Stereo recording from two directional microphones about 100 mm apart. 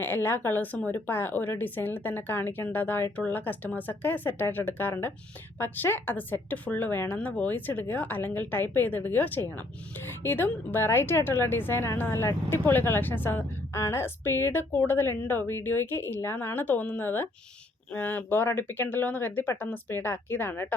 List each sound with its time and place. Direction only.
0.0 s speech: 20° left (ahead or behind)